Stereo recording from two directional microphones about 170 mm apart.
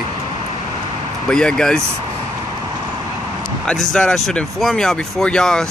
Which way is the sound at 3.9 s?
5° left (ahead or behind).